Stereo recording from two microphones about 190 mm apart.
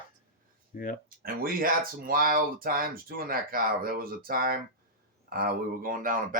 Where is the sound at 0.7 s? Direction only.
45° left (ahead or behind).